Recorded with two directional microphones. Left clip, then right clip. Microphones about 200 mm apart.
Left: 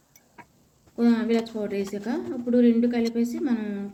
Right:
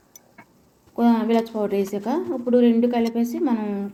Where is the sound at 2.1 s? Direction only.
70° right (ahead or behind).